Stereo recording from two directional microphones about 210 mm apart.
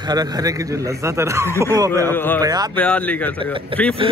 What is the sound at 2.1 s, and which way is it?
Speech, 10° left (ahead or behind).